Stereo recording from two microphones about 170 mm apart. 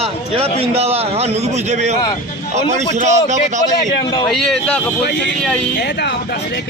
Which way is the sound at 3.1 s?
45° right (ahead or behind).